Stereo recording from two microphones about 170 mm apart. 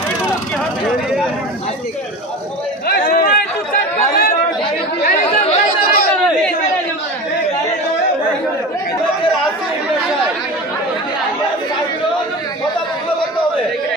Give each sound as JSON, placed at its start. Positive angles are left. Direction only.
{"t": 2.9, "sound": "chatter", "side_deg": 60}